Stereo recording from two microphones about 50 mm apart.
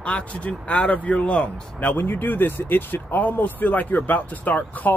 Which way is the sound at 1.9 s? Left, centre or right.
Left.